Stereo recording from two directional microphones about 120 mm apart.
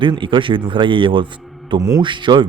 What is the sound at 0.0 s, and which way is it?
A man's voice, 45° right (ahead or behind).